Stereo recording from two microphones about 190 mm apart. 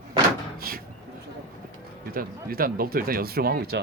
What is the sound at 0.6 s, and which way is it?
Cupboard open or close, 50° right (ahead or behind).